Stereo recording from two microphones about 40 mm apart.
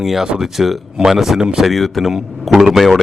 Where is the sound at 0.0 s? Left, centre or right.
Centre.